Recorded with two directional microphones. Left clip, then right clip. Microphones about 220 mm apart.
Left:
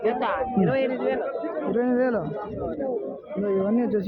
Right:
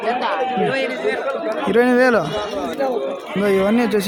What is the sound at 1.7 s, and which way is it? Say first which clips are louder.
Speech: right 10 dB; 20° right (ahead or behind).